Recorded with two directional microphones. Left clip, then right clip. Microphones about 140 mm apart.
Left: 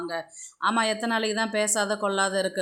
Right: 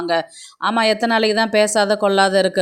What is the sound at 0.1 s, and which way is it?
Speech, 45° right (ahead or behind).